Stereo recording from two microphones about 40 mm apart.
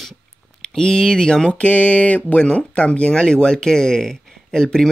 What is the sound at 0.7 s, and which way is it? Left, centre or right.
Speech, centre.